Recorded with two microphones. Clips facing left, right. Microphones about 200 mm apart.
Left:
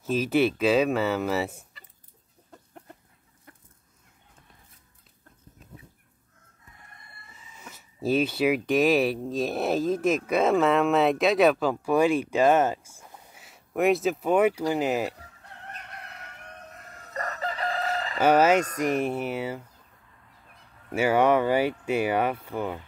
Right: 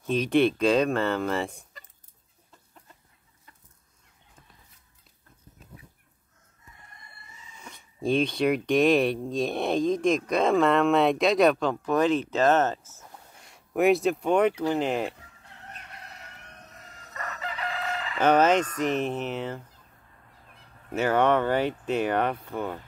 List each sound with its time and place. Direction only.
0.0 s speech: 5° left (ahead or behind)
2.5 s chicken: 60° left (ahead or behind)
7.5 s speech: 5° left (ahead or behind)
17.1 s chicken: 40° left (ahead or behind)
18.2 s speech: 10° left (ahead or behind)
20.9 s speech: 10° left (ahead or behind)